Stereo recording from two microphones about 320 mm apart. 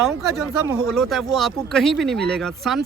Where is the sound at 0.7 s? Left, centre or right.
Centre.